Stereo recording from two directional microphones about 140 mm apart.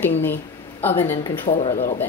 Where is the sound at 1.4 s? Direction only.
40° left (ahead or behind).